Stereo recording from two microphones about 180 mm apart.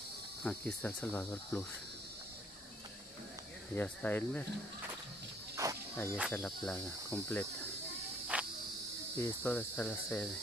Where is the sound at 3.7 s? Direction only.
10° left (ahead or behind).